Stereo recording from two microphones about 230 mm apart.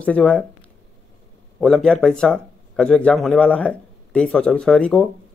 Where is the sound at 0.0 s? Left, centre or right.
Centre.